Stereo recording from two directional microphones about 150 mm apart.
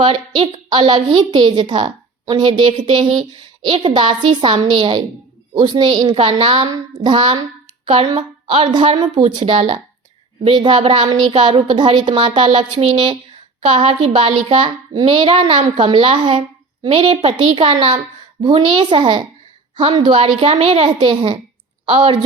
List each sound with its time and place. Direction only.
0.0 s a woman's voice: 35° right (ahead or behind)
6.1 s speech: 40° right (ahead or behind)
10.4 s a woman's voice: 30° right (ahead or behind)